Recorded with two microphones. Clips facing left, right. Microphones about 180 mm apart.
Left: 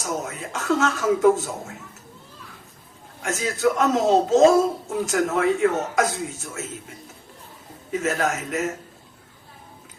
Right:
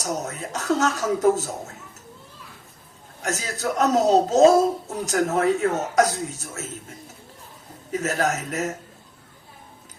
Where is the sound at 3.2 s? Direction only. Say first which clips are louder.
Left 3 dB; 40° right (ahead or behind).